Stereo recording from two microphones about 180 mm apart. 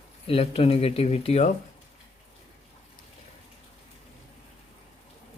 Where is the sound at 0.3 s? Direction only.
35° left (ahead or behind).